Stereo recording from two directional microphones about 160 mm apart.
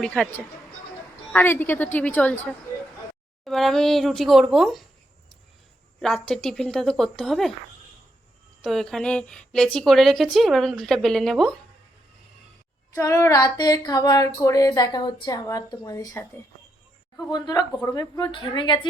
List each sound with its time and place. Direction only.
0.0 s a woman's voice: 5° left (ahead or behind)
3.4 s a woman's voice: centre (ahead or behind)
6.0 s a woman's voice: 5° left (ahead or behind)
8.6 s a woman's voice: 5° left (ahead or behind)
12.9 s a woman's voice: 20° left (ahead or behind)